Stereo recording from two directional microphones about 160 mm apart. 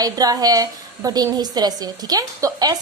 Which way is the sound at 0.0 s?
20° right (ahead or behind).